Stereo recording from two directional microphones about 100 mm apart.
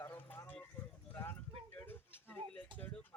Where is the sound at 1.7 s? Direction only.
20° left (ahead or behind).